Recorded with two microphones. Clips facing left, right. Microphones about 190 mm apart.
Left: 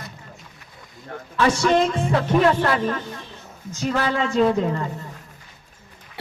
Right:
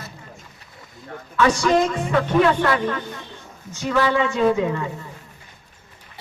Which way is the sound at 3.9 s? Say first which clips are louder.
Right 3 dB; 40° left (ahead or behind).